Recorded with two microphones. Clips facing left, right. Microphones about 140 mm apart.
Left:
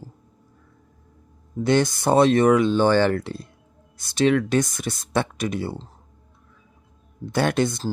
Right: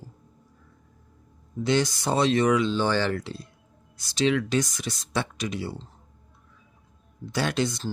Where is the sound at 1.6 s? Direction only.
55° left (ahead or behind).